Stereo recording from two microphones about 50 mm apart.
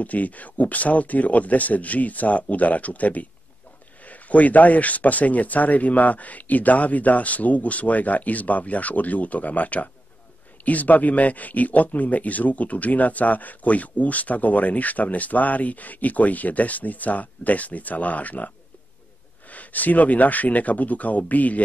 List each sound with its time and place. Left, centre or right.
0.0 s speech: left
19.5 s speech: left